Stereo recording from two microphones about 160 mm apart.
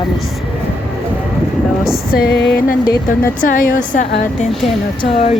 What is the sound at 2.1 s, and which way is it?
Music, 80° left.